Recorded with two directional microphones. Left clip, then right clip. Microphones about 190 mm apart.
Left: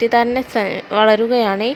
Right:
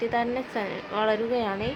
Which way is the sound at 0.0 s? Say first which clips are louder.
Left 12 dB; 55° left (ahead or behind).